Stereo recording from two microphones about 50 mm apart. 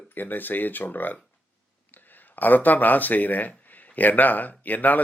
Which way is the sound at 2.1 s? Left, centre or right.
Left.